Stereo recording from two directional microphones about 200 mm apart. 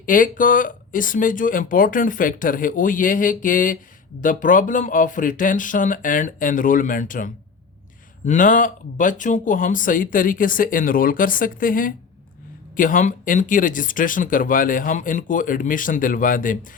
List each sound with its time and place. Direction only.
0.0 s speech: 40° left (ahead or behind)